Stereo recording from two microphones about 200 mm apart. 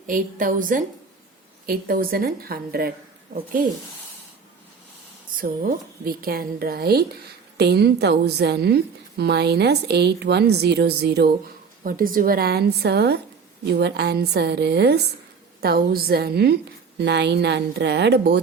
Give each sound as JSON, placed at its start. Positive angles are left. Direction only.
{"t": 0.1, "sound": "a woman's voice", "side_deg": -45}
{"t": 5.4, "sound": "a woman's voice", "side_deg": -50}
{"t": 11.8, "sound": "a woman's voice", "side_deg": -45}